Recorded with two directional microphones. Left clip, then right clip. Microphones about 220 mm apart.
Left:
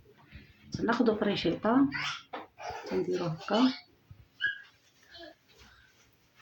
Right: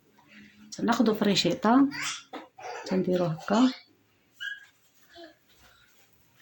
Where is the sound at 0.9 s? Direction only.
55° right (ahead or behind).